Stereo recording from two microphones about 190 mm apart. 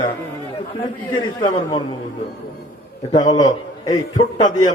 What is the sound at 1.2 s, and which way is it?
Speech, 25° left (ahead or behind).